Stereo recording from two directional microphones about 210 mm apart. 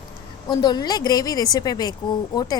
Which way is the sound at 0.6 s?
20° left (ahead or behind).